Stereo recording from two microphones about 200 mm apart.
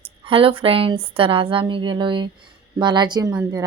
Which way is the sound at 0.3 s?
25° right (ahead or behind).